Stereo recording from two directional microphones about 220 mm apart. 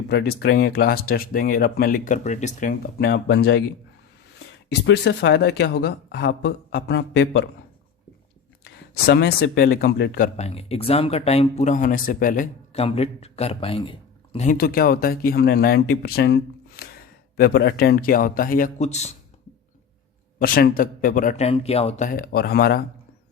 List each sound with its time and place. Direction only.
0.1 s speech: 45° left (ahead or behind)
4.9 s speech: 50° left (ahead or behind)
8.6 s speech: 45° left (ahead or behind)
10.3 s speech: 30° left (ahead or behind)
14.6 s speech: 45° left (ahead or behind)
20.4 s speech: 40° left (ahead or behind)